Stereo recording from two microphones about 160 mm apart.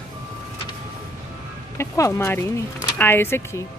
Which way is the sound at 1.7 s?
20° left (ahead or behind).